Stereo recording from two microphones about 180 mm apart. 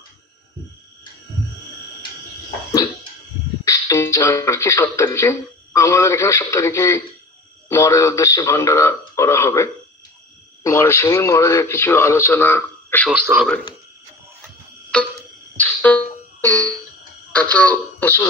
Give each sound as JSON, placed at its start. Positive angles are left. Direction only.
{"t": 2.7, "sound": "a sound", "side_deg": 25}
{"t": 3.6, "sound": "speech", "side_deg": 15}
{"t": 13.1, "sound": "a man's voice", "side_deg": -10}
{"t": 14.9, "sound": "clock", "side_deg": 5}
{"t": 15.6, "sound": "music", "side_deg": 10}
{"t": 17.4, "sound": "speech", "side_deg": 10}